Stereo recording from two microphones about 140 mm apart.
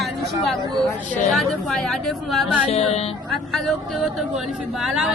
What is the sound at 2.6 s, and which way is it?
Speech, 50° left (ahead or behind).